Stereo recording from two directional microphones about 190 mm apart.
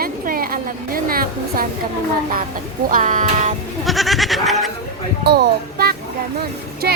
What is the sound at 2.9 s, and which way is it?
Speech, 40° right (ahead or behind).